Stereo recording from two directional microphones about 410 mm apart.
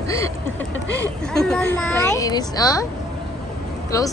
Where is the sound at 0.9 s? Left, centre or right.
Left.